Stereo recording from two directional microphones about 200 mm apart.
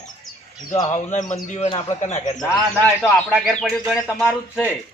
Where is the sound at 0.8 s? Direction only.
35° left (ahead or behind).